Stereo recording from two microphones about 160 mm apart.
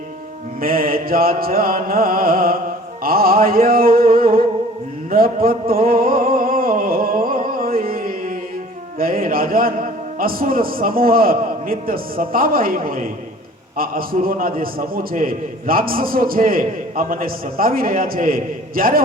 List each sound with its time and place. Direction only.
0.6 s a man's voice: 65° right (ahead or behind)
5.1 s a sound: 65° right (ahead or behind)
9.0 s a man's voice: 65° right (ahead or behind)